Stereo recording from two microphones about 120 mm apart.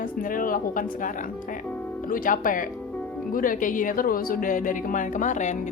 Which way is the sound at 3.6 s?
90° left.